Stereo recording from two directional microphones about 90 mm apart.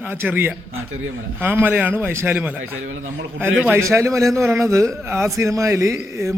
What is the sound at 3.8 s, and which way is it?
A man's voice, 35° right (ahead or behind).